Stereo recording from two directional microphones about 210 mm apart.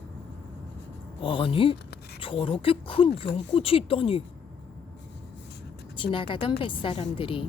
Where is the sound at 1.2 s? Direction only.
25° left (ahead or behind).